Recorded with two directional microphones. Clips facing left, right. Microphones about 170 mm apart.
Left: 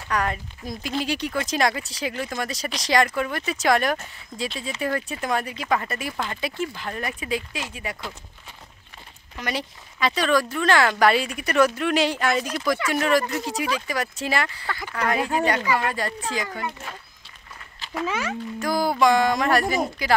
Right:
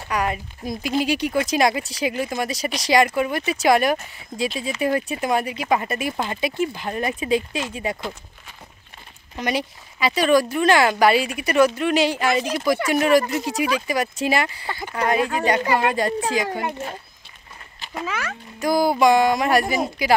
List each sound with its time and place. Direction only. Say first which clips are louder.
0.1 s speech: right 2 dB; 10° right (ahead or behind)
9.4 s speech: right 5 dB; 15° right (ahead or behind)
18.0 s speech: left 2 dB; 20° left (ahead or behind)
18.6 s speech: right 4 dB; 15° right (ahead or behind)